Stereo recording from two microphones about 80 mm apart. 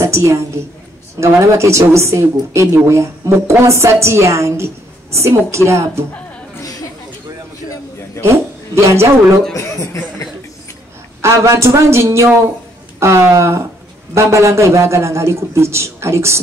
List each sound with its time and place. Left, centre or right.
0.0 s a sound: right
1.2 s a woman's voice: right
8.2 s speech: right
9.5 s speech: left
11.1 s a woman's voice: right